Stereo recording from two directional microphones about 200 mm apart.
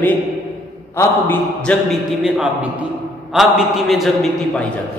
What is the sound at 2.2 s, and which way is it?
A woman's voice, 5° right (ahead or behind).